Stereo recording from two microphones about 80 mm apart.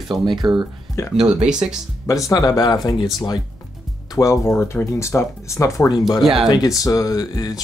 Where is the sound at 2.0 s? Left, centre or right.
Left.